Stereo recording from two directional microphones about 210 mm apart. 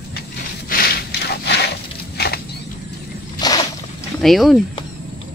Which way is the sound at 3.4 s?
20° left (ahead or behind).